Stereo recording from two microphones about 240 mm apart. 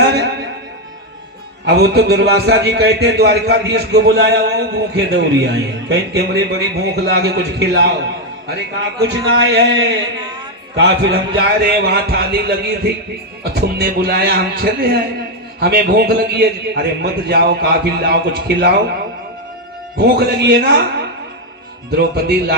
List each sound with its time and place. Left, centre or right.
0.0 s music: right
1.6 s a man's voice: right
9.3 s a man's voice: right
20.1 s a man's voice: right
21.9 s a man's voice: right